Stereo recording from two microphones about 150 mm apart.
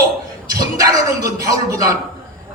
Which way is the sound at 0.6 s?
25° right (ahead or behind).